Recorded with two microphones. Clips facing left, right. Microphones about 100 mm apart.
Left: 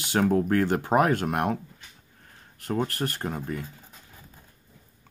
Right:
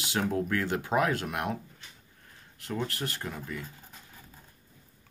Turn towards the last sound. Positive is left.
turn(degrees=45)  # may be behind; listen again after turning